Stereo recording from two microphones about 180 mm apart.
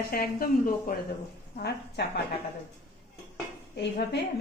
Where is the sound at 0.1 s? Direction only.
55° left (ahead or behind).